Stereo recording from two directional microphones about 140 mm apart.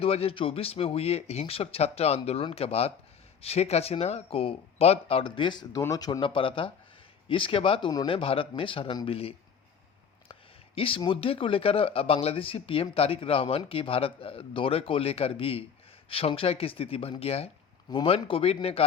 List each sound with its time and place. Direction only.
0.0 s speech: 45° left (ahead or behind)
10.8 s speech: 40° left (ahead or behind)